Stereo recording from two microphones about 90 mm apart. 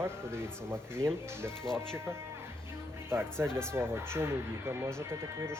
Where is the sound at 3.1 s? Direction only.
25° right (ahead or behind).